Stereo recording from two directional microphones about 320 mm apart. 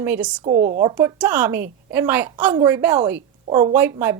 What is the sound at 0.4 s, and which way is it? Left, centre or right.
Speech, right.